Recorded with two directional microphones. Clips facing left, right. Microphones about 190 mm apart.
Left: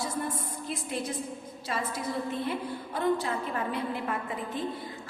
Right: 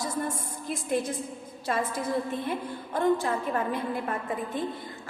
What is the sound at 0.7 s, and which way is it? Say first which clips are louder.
A woman's voice: right 6 dB; 50° right (ahead or behind).